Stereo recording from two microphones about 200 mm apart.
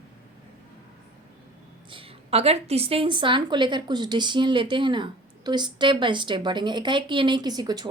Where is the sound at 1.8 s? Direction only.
25° right (ahead or behind).